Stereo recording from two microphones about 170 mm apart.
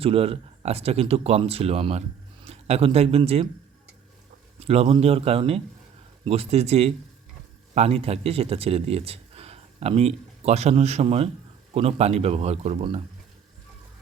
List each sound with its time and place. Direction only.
0.0 s speech: 35° right (ahead or behind)
4.6 s a man's voice: 35° right (ahead or behind)